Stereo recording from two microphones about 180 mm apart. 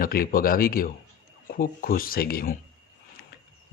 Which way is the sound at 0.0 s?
55° left (ahead or behind).